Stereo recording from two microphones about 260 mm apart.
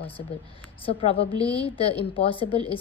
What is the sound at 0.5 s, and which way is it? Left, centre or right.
A woman's voice, left.